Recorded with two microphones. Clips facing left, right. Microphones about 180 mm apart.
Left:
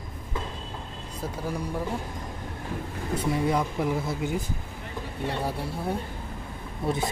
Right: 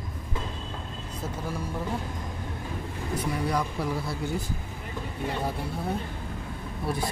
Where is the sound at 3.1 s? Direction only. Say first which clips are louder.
Left 3 dB; 25° left (ahead or behind).